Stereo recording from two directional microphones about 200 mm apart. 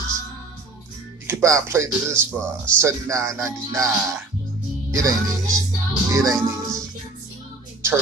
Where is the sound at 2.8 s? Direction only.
15° right (ahead or behind).